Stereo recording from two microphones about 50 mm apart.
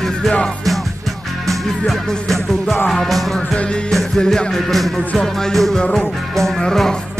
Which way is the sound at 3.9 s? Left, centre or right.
Centre.